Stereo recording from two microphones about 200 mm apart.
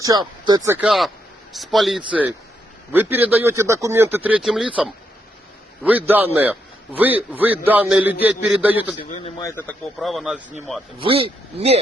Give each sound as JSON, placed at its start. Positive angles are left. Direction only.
{"t": 0.0, "sound": "a man's voice", "side_deg": -20}
{"t": 0.9, "sound": "a man's voice", "side_deg": 0}
{"t": 9.4, "sound": "speech", "side_deg": 10}
{"t": 10.9, "sound": "speech", "side_deg": -30}